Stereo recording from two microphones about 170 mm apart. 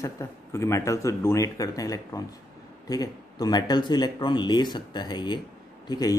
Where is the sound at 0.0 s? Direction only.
15° left (ahead or behind).